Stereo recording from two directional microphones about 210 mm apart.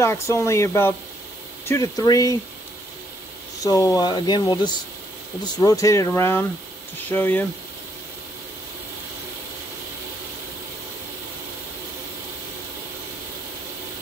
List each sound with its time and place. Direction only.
0.0 s speech: 15° left (ahead or behind)
3.6 s speech: 15° left (ahead or behind)